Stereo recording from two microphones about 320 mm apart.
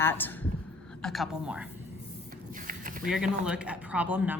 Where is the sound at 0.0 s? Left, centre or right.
Centre.